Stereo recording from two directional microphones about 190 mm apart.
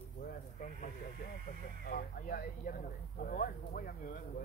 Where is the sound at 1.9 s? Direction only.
50° left (ahead or behind).